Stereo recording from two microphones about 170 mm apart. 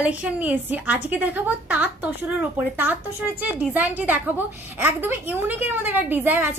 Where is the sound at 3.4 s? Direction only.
10° right (ahead or behind).